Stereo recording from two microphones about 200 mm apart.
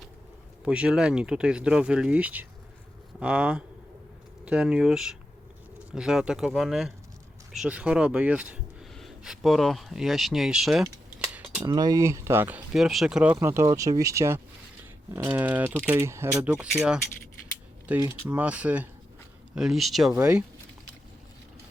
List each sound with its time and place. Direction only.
0.6 s speech: 5° right (ahead or behind)
11.3 s cutlery: 10° right (ahead or behind)
11.6 s speech: 20° right (ahead or behind)